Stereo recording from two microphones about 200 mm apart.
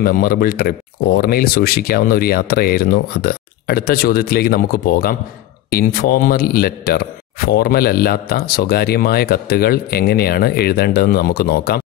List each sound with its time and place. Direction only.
0.0 s a man's voice: 50° left (ahead or behind)